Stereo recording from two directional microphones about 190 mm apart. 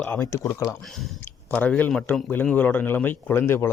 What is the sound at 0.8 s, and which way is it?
Speech, centre (ahead or behind).